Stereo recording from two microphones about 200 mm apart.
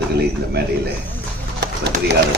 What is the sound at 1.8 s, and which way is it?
Speech, 55° right (ahead or behind).